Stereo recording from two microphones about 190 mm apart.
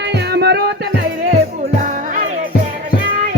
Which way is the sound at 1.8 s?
40° right (ahead or behind).